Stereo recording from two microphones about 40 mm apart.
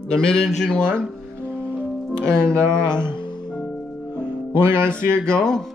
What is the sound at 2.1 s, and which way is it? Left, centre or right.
Speech, left.